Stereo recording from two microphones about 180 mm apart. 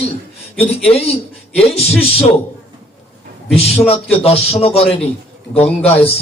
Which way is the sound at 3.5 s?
35° left (ahead or behind).